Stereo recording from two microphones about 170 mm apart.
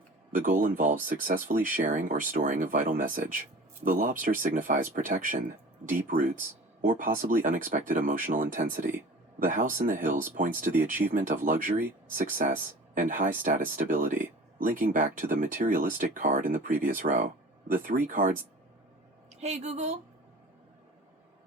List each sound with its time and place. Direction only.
0.3 s speech: 50° right (ahead or behind)
19.3 s a woman's voice: 40° right (ahead or behind)